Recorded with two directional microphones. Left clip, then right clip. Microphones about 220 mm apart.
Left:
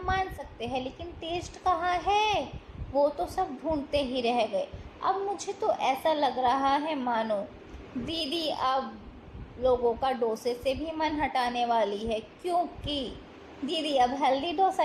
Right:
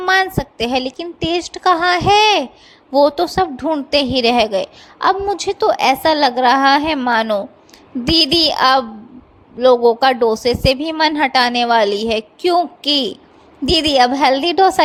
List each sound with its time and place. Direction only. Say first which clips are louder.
0.0 s a woman's voice: right 15 dB; 45° right (ahead or behind)